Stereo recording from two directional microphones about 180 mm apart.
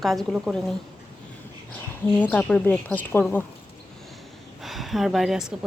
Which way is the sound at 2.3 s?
5° left (ahead or behind).